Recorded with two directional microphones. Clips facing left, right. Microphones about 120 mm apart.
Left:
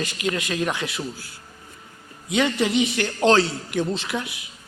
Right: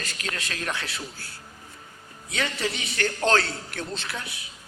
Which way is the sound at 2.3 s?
20° left (ahead or behind).